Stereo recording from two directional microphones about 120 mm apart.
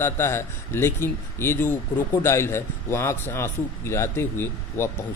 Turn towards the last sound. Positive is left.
turn(degrees=20)  # may be behind; listen again after turning